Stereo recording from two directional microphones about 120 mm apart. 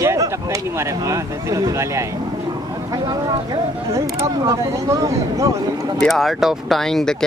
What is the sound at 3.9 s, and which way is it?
Speech, 25° right (ahead or behind).